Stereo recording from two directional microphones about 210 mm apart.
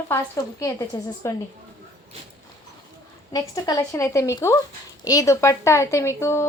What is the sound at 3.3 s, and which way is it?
Speech, 20° left (ahead or behind).